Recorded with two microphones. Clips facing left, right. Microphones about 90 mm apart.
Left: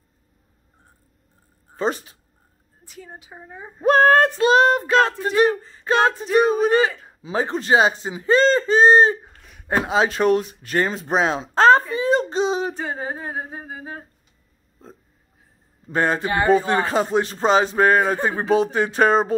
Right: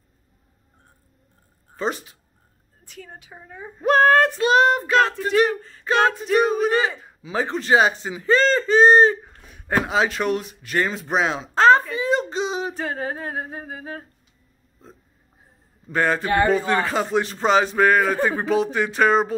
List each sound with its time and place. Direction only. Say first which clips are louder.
1.8 s speech: left 2 dB; 35° left (ahead or behind)
3.0 s humming: left 1 dB; 15° left (ahead or behind)
3.8 s a man's voice: left 1 dB; 30° left (ahead or behind)
12.7 s humming: right 1 dB; 10° left (ahead or behind)
15.9 s a man's voice: even; 25° left (ahead or behind)